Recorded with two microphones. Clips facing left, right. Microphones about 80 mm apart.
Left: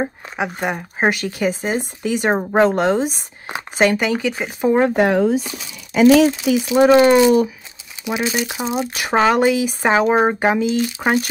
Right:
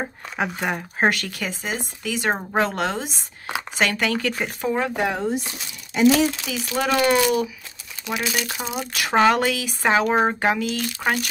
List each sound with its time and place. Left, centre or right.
0.0 s speech: centre
1.2 s speech: left
3.9 s speech: centre
4.6 s speech: left
6.3 s speech: centre